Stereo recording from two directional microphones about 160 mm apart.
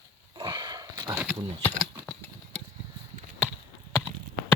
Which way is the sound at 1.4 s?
30° right (ahead or behind).